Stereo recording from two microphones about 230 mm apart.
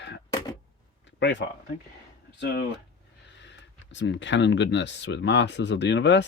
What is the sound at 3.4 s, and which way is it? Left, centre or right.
Speech, left.